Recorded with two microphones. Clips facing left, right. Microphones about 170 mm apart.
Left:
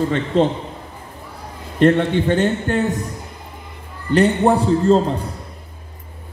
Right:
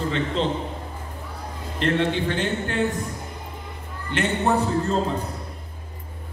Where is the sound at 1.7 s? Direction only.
45° left (ahead or behind).